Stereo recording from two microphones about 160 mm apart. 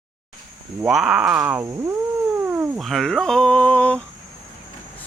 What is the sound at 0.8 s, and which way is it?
Speech, 5° right (ahead or behind).